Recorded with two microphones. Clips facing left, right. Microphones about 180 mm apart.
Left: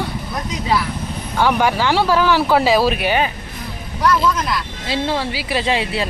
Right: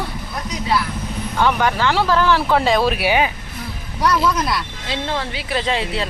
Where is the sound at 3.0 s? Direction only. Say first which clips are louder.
Even; 10° right (ahead or behind).